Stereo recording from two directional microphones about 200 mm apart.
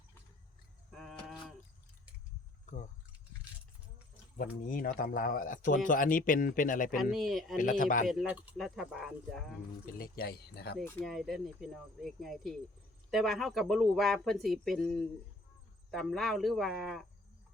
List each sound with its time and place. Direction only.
0.9 s a sound: centre (ahead or behind)
2.6 s a sound: 40° left (ahead or behind)
4.9 s a man's voice: 45° left (ahead or behind)
7.0 s speech: centre (ahead or behind)
7.5 s speech: 40° left (ahead or behind)
8.0 s speech: centre (ahead or behind)
9.8 s a man's voice: 45° left (ahead or behind)
10.8 s speech: 10° left (ahead or behind)
11.1 s speech: centre (ahead or behind)